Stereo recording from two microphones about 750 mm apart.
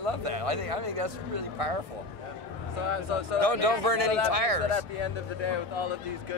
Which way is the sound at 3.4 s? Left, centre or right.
Right.